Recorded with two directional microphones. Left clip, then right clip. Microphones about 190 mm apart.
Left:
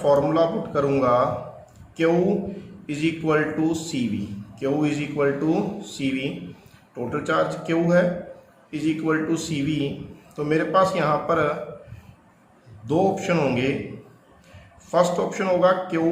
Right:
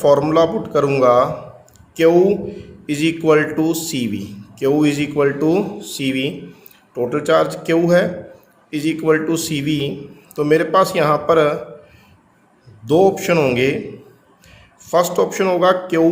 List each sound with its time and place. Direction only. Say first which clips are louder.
0.0 s a man's voice: right 6 dB; 55° right (ahead or behind)
12.8 s speech: right 8 dB; 50° right (ahead or behind)
14.8 s speech: right 5 dB; 55° right (ahead or behind)